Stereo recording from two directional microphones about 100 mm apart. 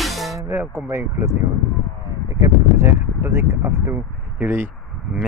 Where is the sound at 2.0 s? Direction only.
30° right (ahead or behind).